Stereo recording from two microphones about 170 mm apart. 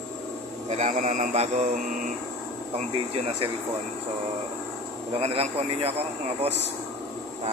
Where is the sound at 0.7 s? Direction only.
45° right (ahead or behind).